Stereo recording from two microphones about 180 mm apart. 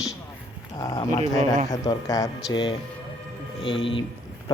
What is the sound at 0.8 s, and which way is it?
Speech, 20° left (ahead or behind).